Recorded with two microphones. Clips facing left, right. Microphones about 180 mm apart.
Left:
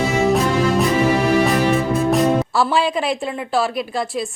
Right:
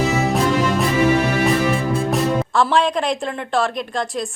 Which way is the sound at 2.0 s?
Centre (ahead or behind).